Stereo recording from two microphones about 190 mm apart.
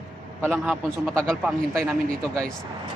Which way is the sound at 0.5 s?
Centre (ahead or behind).